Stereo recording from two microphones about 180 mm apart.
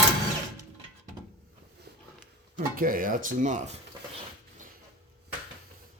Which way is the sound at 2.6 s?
50° right (ahead or behind).